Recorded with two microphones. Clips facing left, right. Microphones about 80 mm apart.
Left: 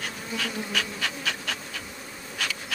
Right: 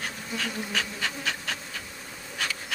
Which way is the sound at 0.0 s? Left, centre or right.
Right.